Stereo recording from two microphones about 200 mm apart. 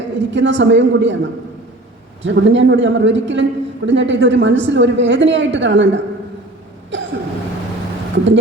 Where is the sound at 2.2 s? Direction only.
65° right (ahead or behind).